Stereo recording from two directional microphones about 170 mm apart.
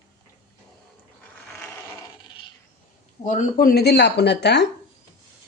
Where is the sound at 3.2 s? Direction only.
45° left (ahead or behind); by 4.6 s 85° left.